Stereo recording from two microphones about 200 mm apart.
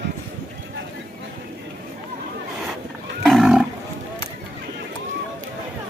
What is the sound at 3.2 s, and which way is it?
Cattle, centre (ahead or behind).